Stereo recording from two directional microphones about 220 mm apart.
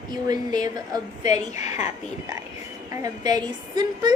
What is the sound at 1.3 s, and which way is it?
Speech, 30° left (ahead or behind).